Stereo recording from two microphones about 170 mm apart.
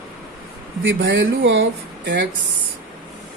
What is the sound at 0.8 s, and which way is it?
Speech, 90° right.